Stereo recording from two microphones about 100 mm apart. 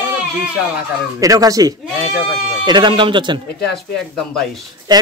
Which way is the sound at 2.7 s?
50° right (ahead or behind).